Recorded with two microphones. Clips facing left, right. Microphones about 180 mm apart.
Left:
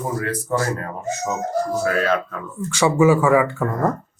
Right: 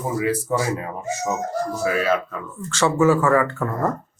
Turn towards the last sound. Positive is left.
turn(degrees=0)  # may be behind; listen again after turning